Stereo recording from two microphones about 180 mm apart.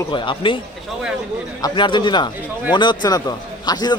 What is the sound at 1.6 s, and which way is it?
A man's voice, 25° left (ahead or behind).